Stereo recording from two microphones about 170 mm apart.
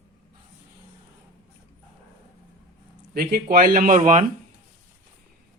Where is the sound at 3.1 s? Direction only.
60° right (ahead or behind); by 4.2 s 45° right (ahead or behind).